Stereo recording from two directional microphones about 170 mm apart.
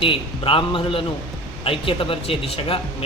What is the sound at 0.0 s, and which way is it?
A man's voice, 30° left (ahead or behind).